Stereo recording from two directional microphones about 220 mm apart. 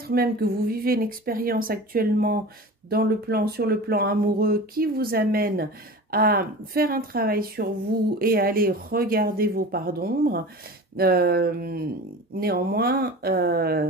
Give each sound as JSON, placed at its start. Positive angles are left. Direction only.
{"t": 0.1, "sound": "speech", "side_deg": -45}